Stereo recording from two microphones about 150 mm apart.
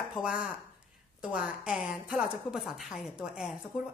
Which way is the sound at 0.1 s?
5° right (ahead or behind).